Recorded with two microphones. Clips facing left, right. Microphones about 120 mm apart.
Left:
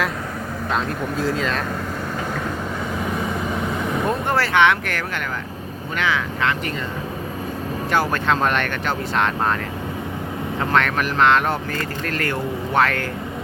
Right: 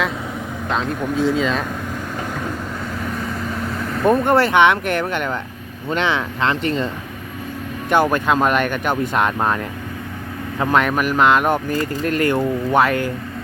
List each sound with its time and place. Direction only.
0.7 s speech: centre (ahead or behind)
3.0 s vehicle: 5° left (ahead or behind)
4.1 s speech: 20° right (ahead or behind)
7.9 s speech: 20° right (ahead or behind)
10.6 s speech: 10° right (ahead or behind)